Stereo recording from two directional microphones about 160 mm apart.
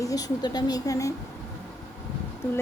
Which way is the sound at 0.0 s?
20° left (ahead or behind).